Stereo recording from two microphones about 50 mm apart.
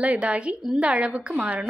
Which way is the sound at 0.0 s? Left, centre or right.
Right.